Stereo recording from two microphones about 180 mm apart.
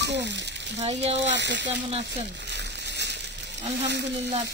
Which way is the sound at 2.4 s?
70° right (ahead or behind).